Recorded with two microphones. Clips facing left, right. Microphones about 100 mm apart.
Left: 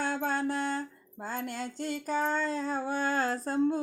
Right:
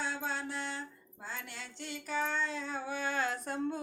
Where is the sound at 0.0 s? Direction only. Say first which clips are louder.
Left 7 dB; 55° left (ahead or behind).